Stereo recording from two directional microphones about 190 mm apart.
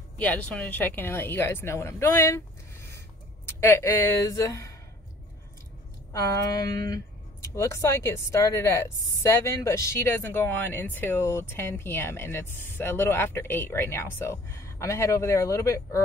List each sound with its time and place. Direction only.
0.2 s a woman's voice: 5° left (ahead or behind)
3.4 s a woman's voice: 15° left (ahead or behind)
6.1 s a woman's voice: 15° left (ahead or behind)